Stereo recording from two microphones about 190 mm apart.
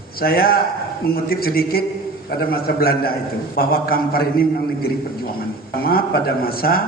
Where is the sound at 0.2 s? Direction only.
50° left (ahead or behind).